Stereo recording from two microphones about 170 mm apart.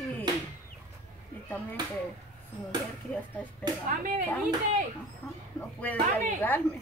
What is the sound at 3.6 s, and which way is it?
Speech, 25° right (ahead or behind).